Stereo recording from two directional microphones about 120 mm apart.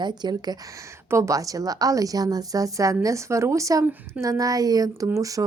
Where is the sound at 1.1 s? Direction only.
25° right (ahead or behind).